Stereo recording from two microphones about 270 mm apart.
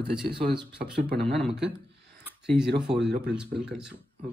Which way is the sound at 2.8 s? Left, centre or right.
Centre.